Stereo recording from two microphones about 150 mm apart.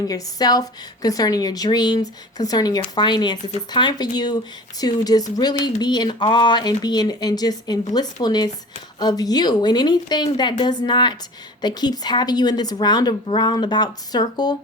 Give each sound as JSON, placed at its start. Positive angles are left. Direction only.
{"t": 0.1, "sound": "a woman's voice", "side_deg": 25}